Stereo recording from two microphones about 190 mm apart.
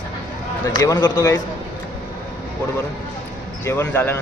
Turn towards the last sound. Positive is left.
turn(degrees=10)  # may be behind; listen again after turning